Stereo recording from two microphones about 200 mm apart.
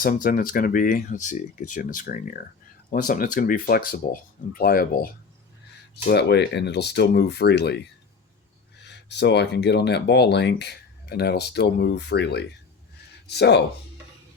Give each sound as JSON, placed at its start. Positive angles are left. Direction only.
{"t": 0.0, "sound": "speech", "side_deg": 45}
{"t": 6.1, "sound": "speech", "side_deg": 55}
{"t": 8.8, "sound": "speech", "side_deg": 60}